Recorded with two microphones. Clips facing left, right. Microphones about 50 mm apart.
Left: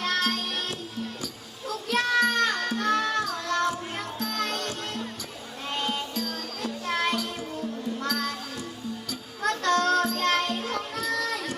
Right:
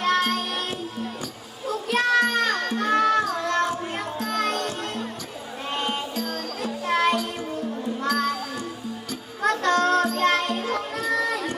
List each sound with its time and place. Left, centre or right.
0.0 s music: right
1.6 s music: right
4.6 s music: centre
6.3 s music: centre
9.4 s music: centre
10.9 s a sound: centre